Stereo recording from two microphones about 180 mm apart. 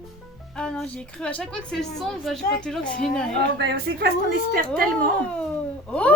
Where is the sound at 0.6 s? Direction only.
5° left (ahead or behind).